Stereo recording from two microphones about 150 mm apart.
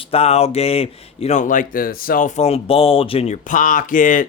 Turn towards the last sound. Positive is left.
turn(degrees=60)  # may be behind; listen again after turning